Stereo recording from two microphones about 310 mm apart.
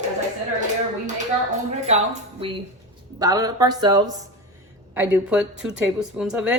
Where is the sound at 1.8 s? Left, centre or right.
Right; by 6.5 s centre.